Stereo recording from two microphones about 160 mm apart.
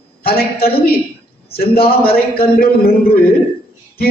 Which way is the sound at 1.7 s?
70° left (ahead or behind).